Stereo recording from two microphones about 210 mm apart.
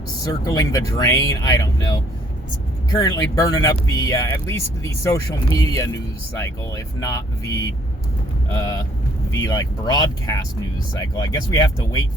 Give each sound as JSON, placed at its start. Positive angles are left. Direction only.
{"t": 0.3, "sound": "speech", "side_deg": 15}
{"t": 2.9, "sound": "speech", "side_deg": 15}